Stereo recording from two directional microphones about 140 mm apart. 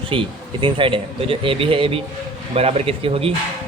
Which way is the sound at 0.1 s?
40° right (ahead or behind).